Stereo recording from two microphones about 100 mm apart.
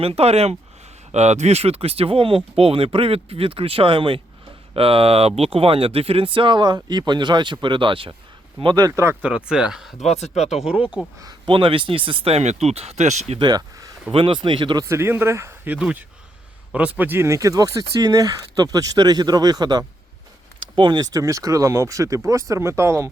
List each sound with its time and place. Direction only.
0.0 s speech: 80° right; by 4.2 s 60° right (ahead or behind)
4.7 s speech: 70° right (ahead or behind)
8.6 s speech: 45° right (ahead or behind)
8.9 s speech: 30° right (ahead or behind)
9.2 s speech: 10° right (ahead or behind)
10.1 s speech: 90° left
10.5 s speech: 5° right (ahead or behind)
11.4 s speech: 60° right (ahead or behind); by 13.4 s 90° right
13.4 s speech: 40° right (ahead or behind)
14.1 s speech: 60° right (ahead or behind)
14.8 s speech: 25° right (ahead or behind)
15.7 s speech: 15° right (ahead or behind); by 21.1 s 50° right (ahead or behind)
21.1 s speech: 35° right (ahead or behind)